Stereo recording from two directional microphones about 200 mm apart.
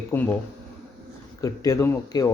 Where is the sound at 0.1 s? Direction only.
15° left (ahead or behind).